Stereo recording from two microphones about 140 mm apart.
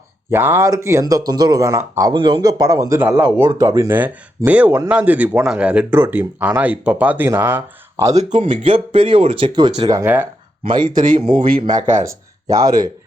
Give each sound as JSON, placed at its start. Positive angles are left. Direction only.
{"t": 0.3, "sound": "speech", "side_deg": -15}
{"t": 2.1, "sound": "speech", "side_deg": -35}
{"t": 3.2, "sound": "speech", "side_deg": -15}
{"t": 8.1, "sound": "speech", "side_deg": -55}
{"t": 8.4, "sound": "speech", "side_deg": -40}